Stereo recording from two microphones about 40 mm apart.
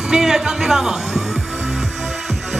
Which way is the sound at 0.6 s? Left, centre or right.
Centre.